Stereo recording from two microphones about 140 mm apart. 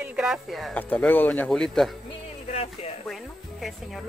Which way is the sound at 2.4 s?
45° left (ahead or behind).